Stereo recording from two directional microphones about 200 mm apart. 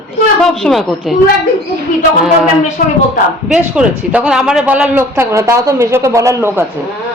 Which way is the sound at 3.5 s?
5° right (ahead or behind).